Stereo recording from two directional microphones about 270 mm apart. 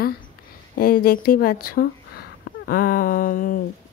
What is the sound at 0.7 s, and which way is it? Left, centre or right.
A woman's voice, left.